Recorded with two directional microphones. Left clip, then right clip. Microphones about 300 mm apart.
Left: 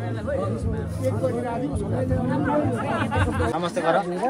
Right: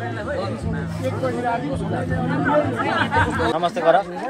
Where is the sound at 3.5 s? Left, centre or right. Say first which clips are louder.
Right 5 dB; right.